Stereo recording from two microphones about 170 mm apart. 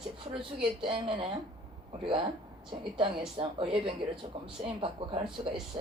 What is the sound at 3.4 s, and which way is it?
A woman's voice, 30° right (ahead or behind).